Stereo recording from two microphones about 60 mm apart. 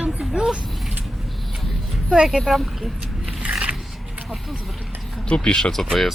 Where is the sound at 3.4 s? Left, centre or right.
Centre.